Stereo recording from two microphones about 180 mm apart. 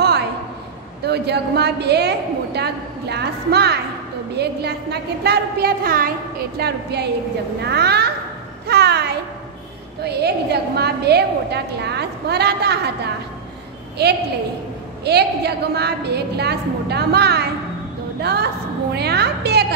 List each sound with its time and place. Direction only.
1.0 s a woman's voice: 65° right (ahead or behind)
6.6 s a woman's voice: 65° right (ahead or behind)
8.6 s a sound: 65° right (ahead or behind)
10.0 s a woman's voice: 65° right (ahead or behind)